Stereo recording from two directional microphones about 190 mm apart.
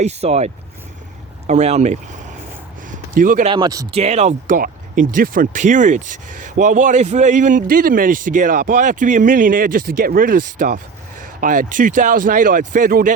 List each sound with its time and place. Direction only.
0.0 s speech: 35° right (ahead or behind)
3.2 s speech: 45° right (ahead or behind)
3.4 s speech: 25° right (ahead or behind)
3.9 s speech: 35° right (ahead or behind)